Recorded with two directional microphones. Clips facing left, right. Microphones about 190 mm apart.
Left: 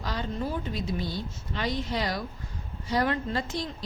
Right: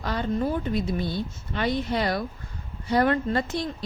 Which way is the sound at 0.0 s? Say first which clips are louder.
Right 4 dB; 55° right (ahead or behind).